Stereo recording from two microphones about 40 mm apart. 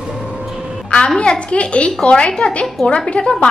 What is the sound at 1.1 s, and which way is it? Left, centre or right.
A woman's voice, left.